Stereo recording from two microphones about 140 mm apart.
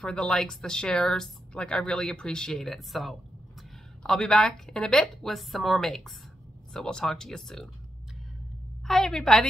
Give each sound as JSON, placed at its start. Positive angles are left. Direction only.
{"t": 0.0, "sound": "speech", "side_deg": 5}
{"t": 8.8, "sound": "speech", "side_deg": 0}